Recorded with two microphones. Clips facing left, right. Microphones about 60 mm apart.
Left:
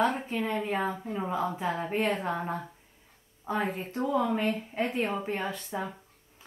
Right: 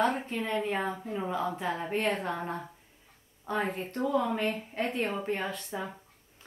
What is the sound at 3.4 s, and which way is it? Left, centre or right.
Speech, centre.